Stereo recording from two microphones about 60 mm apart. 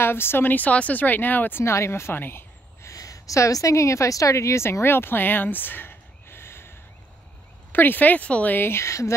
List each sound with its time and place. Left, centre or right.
0.0 s speech: left
1.6 s speech: left
2.8 s a woman's voice: left
8.5 s speech: left
8.8 s speech: left